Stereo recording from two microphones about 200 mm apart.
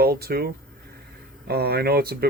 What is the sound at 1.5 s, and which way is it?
Speech, 50° right (ahead or behind).